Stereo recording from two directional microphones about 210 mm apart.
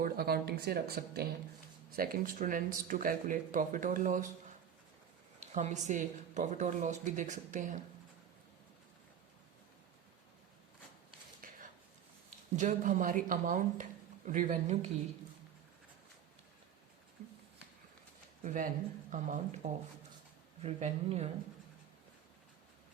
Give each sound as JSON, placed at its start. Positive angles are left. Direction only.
{"t": 0.0, "sound": "speech", "side_deg": -45}
{"t": 5.4, "sound": "speech", "side_deg": -35}
{"t": 11.4, "sound": "a sound", "side_deg": -40}
{"t": 12.5, "sound": "speech", "side_deg": -35}
{"t": 18.4, "sound": "speech", "side_deg": -40}
{"t": 20.6, "sound": "speech", "side_deg": -30}